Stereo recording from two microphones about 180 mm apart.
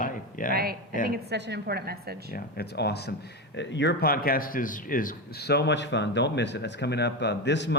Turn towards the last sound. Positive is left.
turn(degrees=75)  # may be behind; listen again after turning